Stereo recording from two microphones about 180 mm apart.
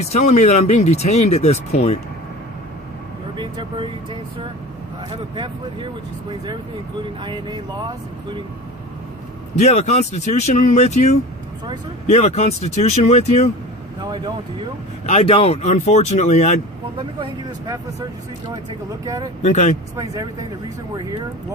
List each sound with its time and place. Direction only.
0.1 s speech: 40° left (ahead or behind)
3.3 s speech: 25° right (ahead or behind)
5.1 s speech: 25° right (ahead or behind)
7.0 s speech: 25° right (ahead or behind)
9.6 s speech: 40° left (ahead or behind)
14.0 s speech: 25° right (ahead or behind)
15.0 s speech: 40° left (ahead or behind)
19.0 s speech: 20° right (ahead or behind)
19.4 s speech: 40° left (ahead or behind)
20.0 s speech: 20° right (ahead or behind)